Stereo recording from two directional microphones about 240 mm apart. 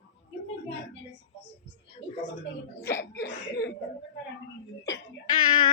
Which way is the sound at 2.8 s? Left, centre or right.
Centre.